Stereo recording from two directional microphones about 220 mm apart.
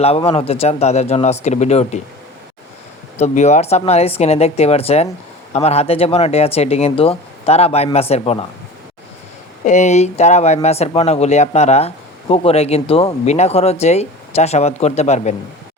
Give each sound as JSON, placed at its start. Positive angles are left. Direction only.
{"t": 0.2, "sound": "speech", "side_deg": 25}
{"t": 3.2, "sound": "speech", "side_deg": 30}
{"t": 9.6, "sound": "speech", "side_deg": 30}